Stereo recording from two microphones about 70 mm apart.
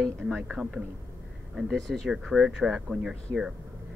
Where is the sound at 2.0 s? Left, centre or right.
Centre.